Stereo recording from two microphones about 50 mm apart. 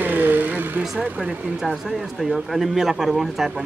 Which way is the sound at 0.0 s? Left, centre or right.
Right.